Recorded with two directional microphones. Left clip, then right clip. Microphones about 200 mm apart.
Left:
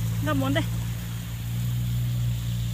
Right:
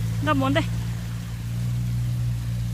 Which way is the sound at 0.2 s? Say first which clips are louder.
Right 4 dB; 20° right (ahead or behind).